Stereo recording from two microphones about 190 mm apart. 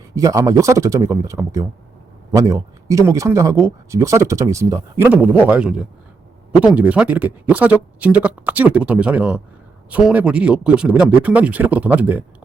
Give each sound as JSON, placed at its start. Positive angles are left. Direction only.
{"t": 0.2, "sound": "speech", "side_deg": -15}